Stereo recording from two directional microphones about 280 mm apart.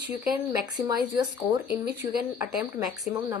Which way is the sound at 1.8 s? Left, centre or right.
Right.